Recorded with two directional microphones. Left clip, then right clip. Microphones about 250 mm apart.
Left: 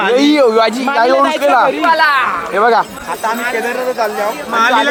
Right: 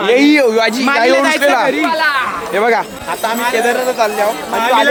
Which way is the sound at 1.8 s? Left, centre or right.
Left.